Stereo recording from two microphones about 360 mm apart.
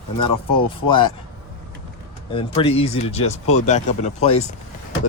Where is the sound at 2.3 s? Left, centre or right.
Centre.